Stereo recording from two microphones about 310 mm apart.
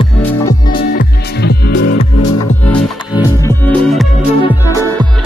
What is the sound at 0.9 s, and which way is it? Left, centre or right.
Music, left.